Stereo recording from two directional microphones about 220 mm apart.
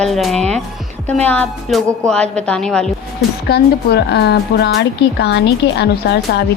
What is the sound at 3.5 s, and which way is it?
A woman's voice, 50° left (ahead or behind).